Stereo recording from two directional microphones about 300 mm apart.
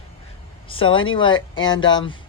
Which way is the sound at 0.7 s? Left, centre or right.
Centre.